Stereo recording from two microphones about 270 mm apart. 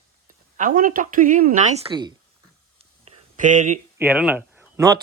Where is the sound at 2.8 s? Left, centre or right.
Right.